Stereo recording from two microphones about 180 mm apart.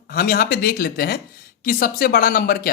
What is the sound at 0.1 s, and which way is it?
Speech, 55° left (ahead or behind).